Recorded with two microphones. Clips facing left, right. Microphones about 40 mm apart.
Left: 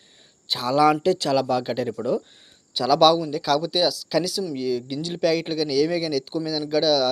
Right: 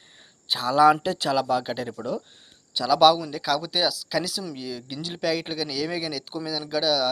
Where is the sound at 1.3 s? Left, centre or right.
Centre.